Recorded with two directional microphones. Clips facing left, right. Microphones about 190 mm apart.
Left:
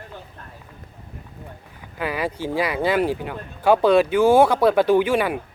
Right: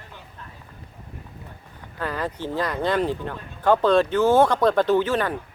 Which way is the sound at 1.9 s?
10° left (ahead or behind).